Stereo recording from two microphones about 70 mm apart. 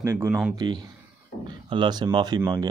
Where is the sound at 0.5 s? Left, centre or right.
Right.